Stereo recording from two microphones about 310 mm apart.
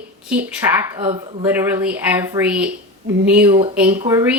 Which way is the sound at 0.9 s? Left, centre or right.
Centre.